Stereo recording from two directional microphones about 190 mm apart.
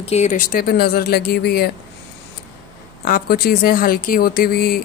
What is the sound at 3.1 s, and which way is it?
Speech, 50° left (ahead or behind).